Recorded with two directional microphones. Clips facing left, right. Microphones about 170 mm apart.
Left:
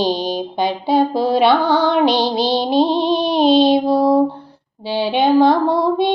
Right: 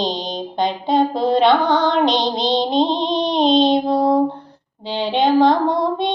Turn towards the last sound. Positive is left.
turn(degrees=5)  # may be behind; listen again after turning